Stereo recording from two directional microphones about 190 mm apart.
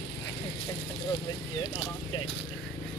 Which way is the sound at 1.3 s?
20° left (ahead or behind).